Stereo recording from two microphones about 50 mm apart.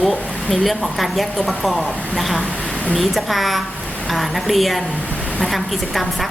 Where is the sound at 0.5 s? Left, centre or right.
Centre.